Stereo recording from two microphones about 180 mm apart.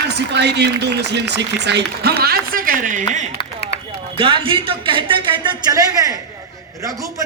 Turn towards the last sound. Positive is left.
turn(degrees=-20)  # may be behind; listen again after turning